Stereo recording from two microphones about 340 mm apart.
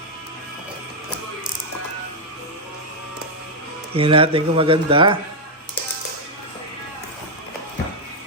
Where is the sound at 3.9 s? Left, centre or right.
Centre.